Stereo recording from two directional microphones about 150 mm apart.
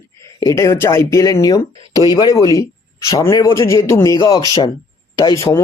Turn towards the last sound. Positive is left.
turn(degrees=20)  # may be behind; listen again after turning